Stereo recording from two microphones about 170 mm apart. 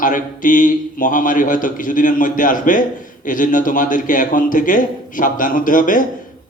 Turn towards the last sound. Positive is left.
turn(degrees=50)  # may be behind; listen again after turning